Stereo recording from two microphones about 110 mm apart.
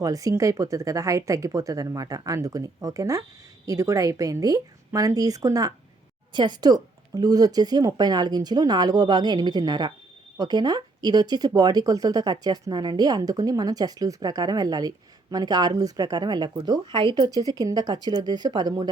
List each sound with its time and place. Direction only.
0.0 s speech: 30° right (ahead or behind); by 17.2 s 50° right (ahead or behind)
17.2 s speech: 35° right (ahead or behind)